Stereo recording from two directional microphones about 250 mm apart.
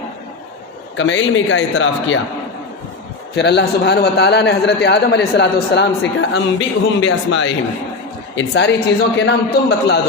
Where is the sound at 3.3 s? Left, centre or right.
Left.